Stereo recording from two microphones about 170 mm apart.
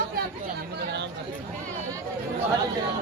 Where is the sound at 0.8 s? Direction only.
80° right.